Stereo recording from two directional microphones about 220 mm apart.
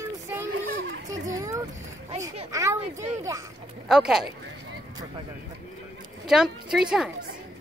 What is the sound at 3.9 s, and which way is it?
Speech, centre (ahead or behind).